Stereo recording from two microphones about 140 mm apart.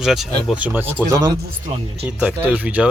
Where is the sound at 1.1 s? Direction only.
30° right (ahead or behind).